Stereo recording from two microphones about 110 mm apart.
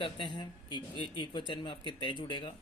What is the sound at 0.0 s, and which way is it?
Speech, 45° left (ahead or behind).